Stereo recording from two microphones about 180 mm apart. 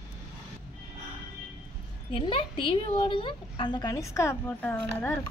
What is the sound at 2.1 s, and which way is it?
A woman's voice, 30° left (ahead or behind).